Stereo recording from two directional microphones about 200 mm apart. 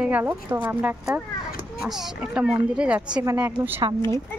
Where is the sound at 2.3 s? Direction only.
5° right (ahead or behind).